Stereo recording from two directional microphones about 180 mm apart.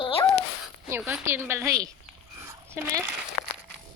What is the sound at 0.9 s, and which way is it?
A woman's voice, 15° right (ahead or behind).